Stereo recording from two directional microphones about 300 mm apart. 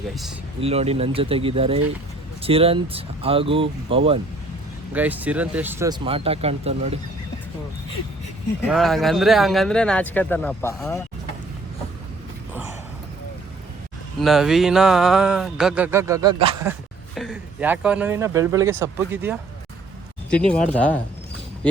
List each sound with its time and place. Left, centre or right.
0.6 s speech: centre
4.9 s speech: centre
8.6 s speech: centre
14.2 s speech: centre
20.7 s speech: centre